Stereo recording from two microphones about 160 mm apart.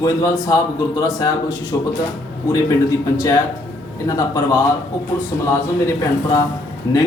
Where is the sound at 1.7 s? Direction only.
25° left (ahead or behind).